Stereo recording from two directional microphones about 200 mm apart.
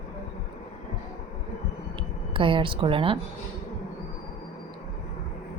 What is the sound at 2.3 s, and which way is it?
Speech, 25° right (ahead or behind).